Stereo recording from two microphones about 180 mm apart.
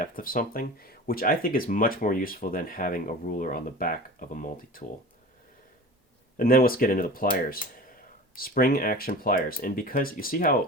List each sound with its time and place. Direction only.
0.0 s speech: 50° left (ahead or behind)
6.3 s speech: 55° left (ahead or behind)